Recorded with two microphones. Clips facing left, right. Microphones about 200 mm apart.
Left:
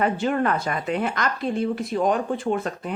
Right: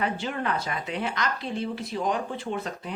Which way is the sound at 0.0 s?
50° left (ahead or behind).